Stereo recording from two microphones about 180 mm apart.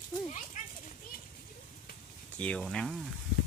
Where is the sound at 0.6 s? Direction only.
45° left (ahead or behind).